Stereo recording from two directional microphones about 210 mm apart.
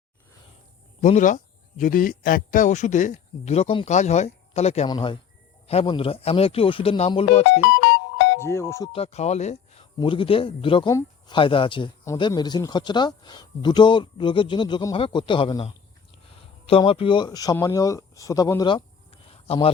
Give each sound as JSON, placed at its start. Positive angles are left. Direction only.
{"t": 1.0, "sound": "a man's voice", "side_deg": 35}
{"t": 7.7, "sound": "music", "side_deg": 55}
{"t": 8.4, "sound": "speech", "side_deg": 10}
{"t": 8.9, "sound": "a man's voice", "side_deg": 30}